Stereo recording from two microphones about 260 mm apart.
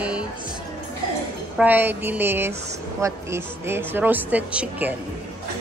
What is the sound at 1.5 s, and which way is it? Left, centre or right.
Speech, centre.